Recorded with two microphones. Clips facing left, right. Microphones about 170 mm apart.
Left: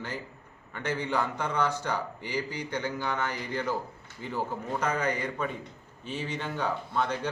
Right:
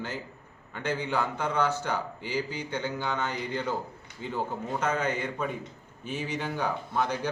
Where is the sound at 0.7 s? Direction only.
10° right (ahead or behind).